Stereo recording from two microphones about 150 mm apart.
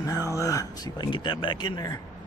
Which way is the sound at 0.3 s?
20° left (ahead or behind).